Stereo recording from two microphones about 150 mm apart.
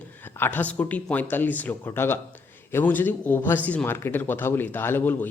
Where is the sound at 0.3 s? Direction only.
15° left (ahead or behind).